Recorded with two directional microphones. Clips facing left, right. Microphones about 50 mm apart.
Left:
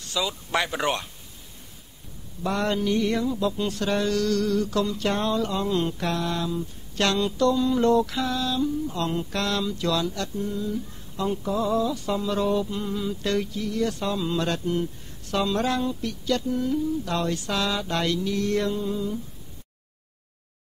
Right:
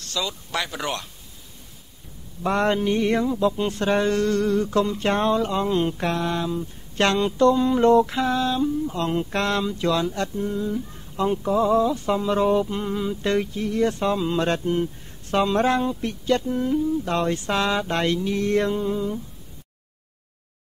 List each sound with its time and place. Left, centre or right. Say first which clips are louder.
0.0 s speech: even; centre
0.5 s speech: left 2 dB; left
2.4 s a sound: right 4 dB; right